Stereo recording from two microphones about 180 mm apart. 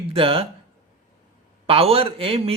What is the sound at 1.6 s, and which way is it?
Speech, 30° right (ahead or behind).